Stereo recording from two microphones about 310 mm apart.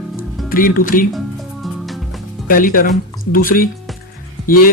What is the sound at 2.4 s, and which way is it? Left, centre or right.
Speech, left.